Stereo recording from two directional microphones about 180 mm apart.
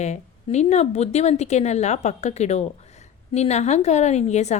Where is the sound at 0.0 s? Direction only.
40° left (ahead or behind).